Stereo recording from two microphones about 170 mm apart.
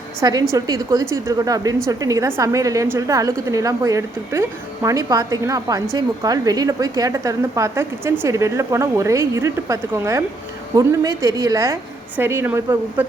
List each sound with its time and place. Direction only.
0.2 s a woman's voice: 20° right (ahead or behind)